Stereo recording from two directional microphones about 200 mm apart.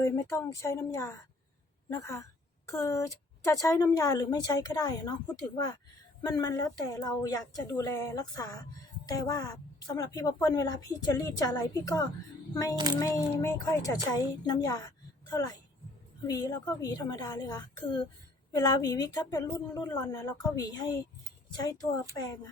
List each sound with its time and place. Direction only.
0.0 s a woman's voice: 15° left (ahead or behind)
6.2 s a woman's voice: 20° left (ahead or behind)
12.7 s speech: 20° right (ahead or behind)
13.0 s a woman's voice: 15° left (ahead or behind)